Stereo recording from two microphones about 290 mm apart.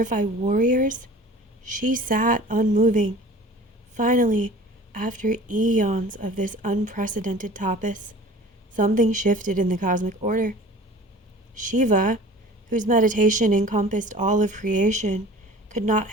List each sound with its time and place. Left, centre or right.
0.0 s a woman's voice: right